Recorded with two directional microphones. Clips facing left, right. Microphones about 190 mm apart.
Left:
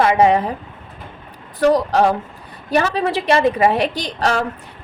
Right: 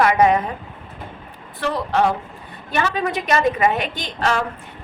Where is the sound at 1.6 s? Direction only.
40° left (ahead or behind).